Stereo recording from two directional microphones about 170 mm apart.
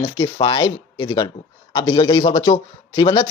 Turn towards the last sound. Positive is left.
turn(degrees=25)  # may be behind; listen again after turning